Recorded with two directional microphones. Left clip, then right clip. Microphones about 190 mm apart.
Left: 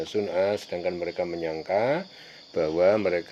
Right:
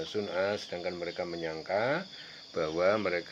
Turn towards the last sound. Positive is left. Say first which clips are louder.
# left 6 dB
turn(degrees=45)  # may be behind; listen again after turning